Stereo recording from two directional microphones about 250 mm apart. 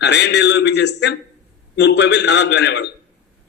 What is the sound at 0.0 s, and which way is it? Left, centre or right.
A man's voice, left.